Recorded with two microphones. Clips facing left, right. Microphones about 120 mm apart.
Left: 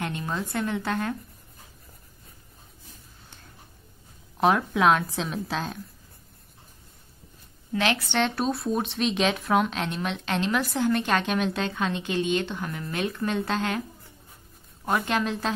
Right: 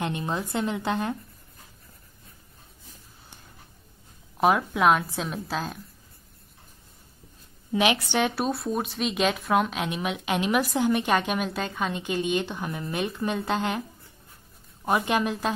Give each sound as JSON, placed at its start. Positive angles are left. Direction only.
{"t": 0.0, "sound": "a woman's voice", "side_deg": -20}
{"t": 4.4, "sound": "a woman's voice", "side_deg": -5}
{"t": 7.7, "sound": "a woman's voice", "side_deg": -15}
{"t": 14.9, "sound": "a woman's voice", "side_deg": -15}